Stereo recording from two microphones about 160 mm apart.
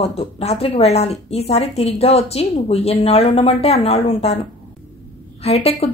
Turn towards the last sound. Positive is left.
turn(degrees=40)  # may be behind; listen again after turning